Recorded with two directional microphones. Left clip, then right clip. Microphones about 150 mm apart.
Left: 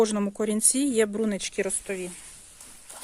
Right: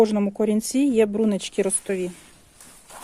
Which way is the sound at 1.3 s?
25° right (ahead or behind).